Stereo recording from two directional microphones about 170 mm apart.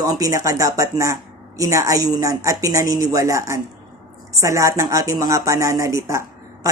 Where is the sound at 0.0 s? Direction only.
20° right (ahead or behind).